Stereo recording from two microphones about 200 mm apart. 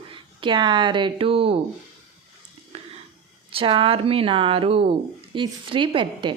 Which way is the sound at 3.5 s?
25° right (ahead or behind).